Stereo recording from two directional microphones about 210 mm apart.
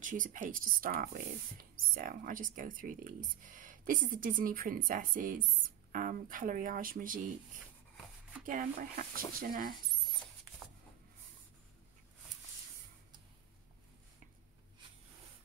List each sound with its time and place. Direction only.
0.0 s speech: 40° right (ahead or behind)
8.5 s speech: 40° right (ahead or behind)